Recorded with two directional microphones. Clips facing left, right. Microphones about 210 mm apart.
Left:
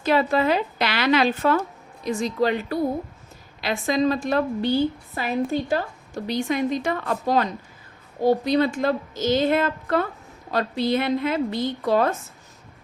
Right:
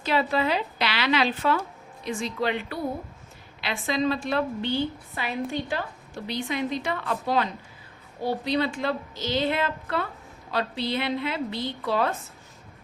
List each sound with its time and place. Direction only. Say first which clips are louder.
0.0 s a woman's voice: left 4 dB; 45° left (ahead or behind)